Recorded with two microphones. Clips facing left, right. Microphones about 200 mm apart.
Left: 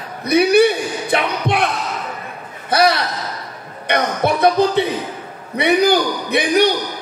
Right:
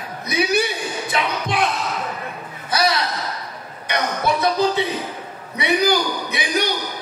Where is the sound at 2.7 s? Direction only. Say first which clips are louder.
Left 5 dB; 60° left (ahead or behind).